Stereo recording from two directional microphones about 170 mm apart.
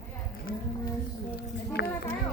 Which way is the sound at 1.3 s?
75° left (ahead or behind).